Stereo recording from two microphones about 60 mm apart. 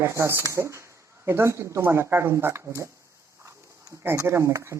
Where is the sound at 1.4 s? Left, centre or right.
Right.